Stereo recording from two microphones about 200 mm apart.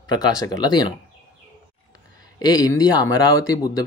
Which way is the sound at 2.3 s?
20° left (ahead or behind).